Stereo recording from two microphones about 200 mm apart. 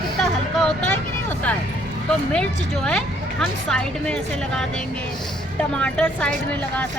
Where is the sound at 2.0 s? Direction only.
5° left (ahead or behind).